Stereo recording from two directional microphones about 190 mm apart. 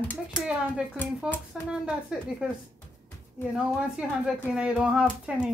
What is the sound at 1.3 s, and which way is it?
Speech, 5° right (ahead or behind).